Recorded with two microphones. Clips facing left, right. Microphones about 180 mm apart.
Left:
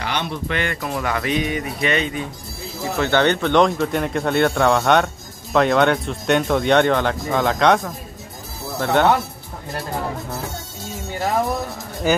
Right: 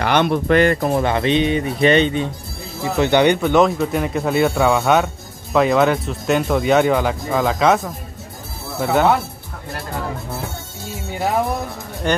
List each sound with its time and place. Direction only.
0.0 s speech: 55° right (ahead or behind); by 2.2 s 30° right (ahead or behind)
3.0 s speech: 15° right (ahead or behind)
12.0 s speech: 5° left (ahead or behind)